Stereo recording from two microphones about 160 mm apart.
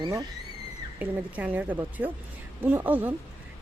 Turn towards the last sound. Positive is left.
turn(degrees=-10)  # may be behind; listen again after turning